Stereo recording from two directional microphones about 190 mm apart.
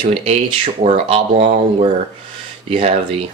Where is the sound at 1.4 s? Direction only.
45° right (ahead or behind).